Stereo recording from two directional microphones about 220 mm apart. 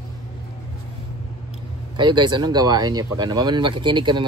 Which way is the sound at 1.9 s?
20° right (ahead or behind).